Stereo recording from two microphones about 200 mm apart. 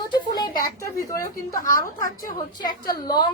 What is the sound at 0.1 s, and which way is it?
A woman's voice, 20° left (ahead or behind).